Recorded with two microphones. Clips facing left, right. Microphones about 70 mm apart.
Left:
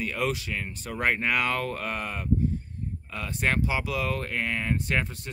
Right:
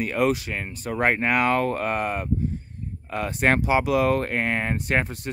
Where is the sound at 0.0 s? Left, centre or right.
Right.